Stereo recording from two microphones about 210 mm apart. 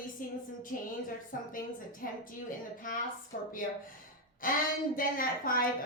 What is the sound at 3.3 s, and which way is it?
A woman's voice, 40° left (ahead or behind).